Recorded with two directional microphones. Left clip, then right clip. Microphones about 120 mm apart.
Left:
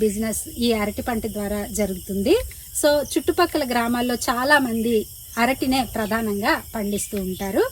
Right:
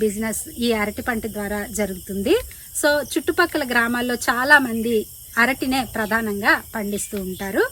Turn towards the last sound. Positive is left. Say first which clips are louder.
# even
turn(degrees=0)  # may be behind; listen again after turning